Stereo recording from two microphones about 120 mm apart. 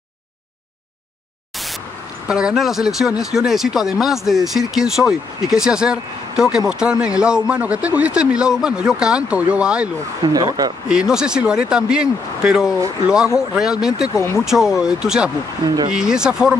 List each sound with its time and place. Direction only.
2.2 s speech: 5° right (ahead or behind)
10.2 s speech: 35° right (ahead or behind)
10.9 s speech: 5° right (ahead or behind)
14.1 s speech: 20° left (ahead or behind)
14.4 s speech: 5° right (ahead or behind)